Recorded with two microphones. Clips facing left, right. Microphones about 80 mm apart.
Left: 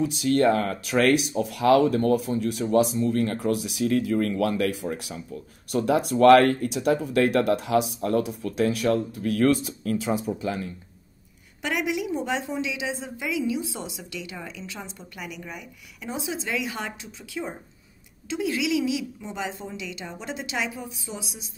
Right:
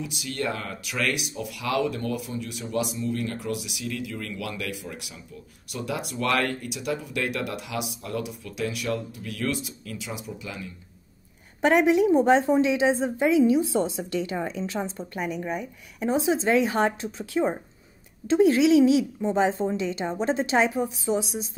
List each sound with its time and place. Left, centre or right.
0.0 s speech: left
11.6 s a woman's voice: right